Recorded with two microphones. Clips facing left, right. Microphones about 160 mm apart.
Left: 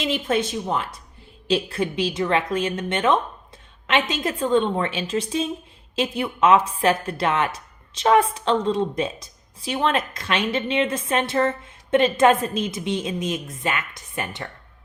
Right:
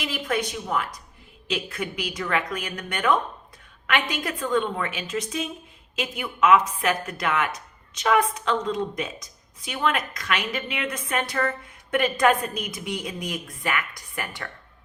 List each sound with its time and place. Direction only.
0.0 s a woman's voice: 25° left (ahead or behind)